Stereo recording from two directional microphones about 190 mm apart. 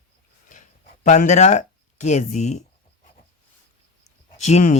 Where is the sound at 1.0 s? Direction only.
40° left (ahead or behind).